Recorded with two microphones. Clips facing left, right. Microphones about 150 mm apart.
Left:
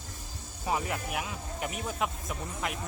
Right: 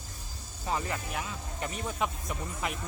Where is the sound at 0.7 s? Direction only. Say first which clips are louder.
Left 2 dB; 10° left (ahead or behind).